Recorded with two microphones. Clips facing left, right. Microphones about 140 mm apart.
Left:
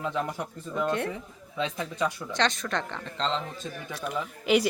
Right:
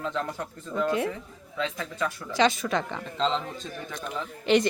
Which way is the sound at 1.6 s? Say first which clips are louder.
Left 1 dB; 20° left (ahead or behind).